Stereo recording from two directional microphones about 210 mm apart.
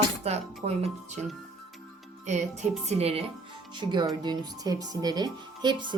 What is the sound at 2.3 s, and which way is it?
Speech, 35° right (ahead or behind).